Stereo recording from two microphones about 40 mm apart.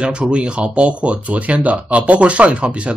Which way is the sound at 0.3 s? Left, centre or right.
Right.